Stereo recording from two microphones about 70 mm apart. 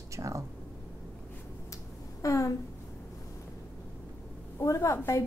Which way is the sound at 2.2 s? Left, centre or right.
Left.